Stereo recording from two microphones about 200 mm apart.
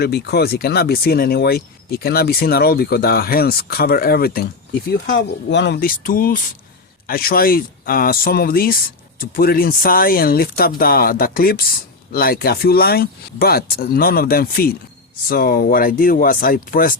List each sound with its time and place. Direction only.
0.0 s speech: 55° left (ahead or behind)
5.5 s speech: 60° left (ahead or behind)